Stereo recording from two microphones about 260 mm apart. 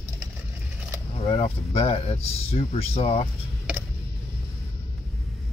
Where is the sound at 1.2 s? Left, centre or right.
Left.